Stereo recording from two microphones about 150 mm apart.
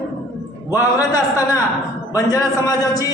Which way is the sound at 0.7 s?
25° left (ahead or behind).